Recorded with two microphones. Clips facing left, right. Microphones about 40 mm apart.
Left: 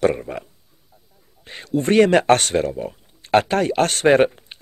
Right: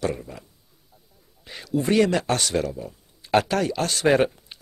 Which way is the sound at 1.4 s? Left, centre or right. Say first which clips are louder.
Left 3 dB; left.